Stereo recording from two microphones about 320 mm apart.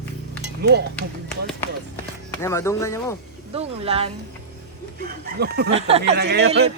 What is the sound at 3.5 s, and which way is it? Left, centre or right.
Speech, centre.